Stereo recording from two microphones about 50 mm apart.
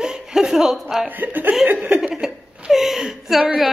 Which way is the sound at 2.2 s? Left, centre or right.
Centre.